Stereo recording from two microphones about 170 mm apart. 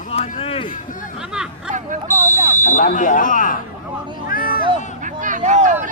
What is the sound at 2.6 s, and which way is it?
Speech, 50° left (ahead or behind).